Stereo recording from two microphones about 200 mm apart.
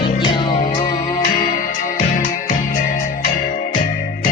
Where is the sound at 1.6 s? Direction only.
40° left (ahead or behind).